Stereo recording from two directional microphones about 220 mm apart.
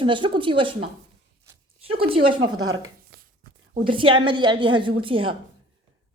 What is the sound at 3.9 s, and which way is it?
A woman's voice, 25° right (ahead or behind).